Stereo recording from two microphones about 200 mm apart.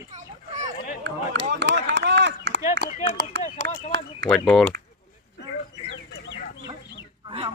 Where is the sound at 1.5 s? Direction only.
60° right (ahead or behind).